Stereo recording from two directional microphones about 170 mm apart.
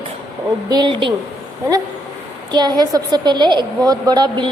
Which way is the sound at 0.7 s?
25° right (ahead or behind).